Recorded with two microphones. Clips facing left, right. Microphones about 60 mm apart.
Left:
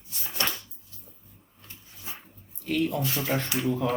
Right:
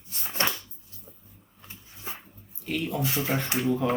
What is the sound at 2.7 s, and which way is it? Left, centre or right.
Speech, centre.